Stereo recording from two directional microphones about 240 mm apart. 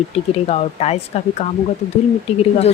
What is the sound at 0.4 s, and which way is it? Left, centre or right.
Speech, left.